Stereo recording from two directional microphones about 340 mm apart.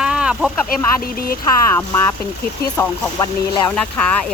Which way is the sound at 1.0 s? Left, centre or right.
Left.